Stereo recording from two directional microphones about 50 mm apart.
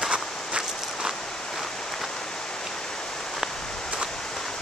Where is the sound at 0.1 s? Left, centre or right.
Centre.